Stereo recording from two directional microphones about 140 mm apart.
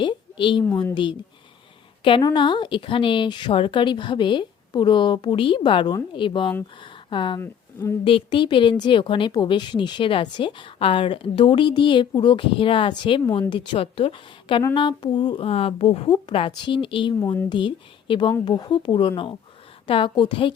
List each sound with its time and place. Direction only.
0.0 s a woman's voice: 35° left (ahead or behind)
2.0 s a woman's voice: 35° left (ahead or behind)
6.8 s a sound: 35° left (ahead or behind)
7.3 s speech: 20° left (ahead or behind)
8.0 s a woman's voice: 40° left (ahead or behind)
15.4 s speech: 45° left (ahead or behind)
16.5 s a woman's voice: 35° left (ahead or behind)